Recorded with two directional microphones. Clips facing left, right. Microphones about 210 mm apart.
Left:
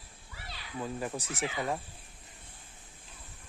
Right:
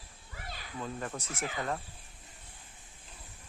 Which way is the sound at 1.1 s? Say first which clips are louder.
Left 3 dB; 35° left (ahead or behind).